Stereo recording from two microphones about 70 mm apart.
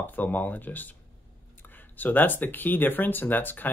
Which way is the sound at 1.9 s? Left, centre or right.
Left.